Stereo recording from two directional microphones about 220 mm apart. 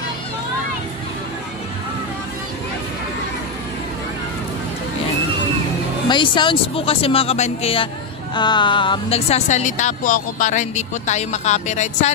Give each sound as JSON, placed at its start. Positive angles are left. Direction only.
{"t": 6.0, "sound": "speech", "side_deg": 20}